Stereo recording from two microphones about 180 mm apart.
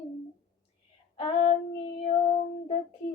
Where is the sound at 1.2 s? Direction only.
35° left (ahead or behind).